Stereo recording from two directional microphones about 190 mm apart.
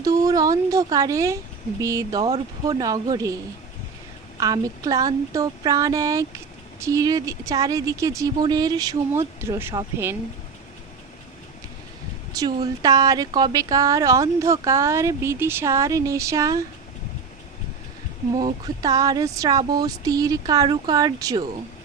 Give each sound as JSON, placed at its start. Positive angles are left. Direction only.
{"t": 0.0, "sound": "speech", "side_deg": -20}
{"t": 4.4, "sound": "speech", "side_deg": -20}
{"t": 12.3, "sound": "speech", "side_deg": -20}
{"t": 18.4, "sound": "speech", "side_deg": -20}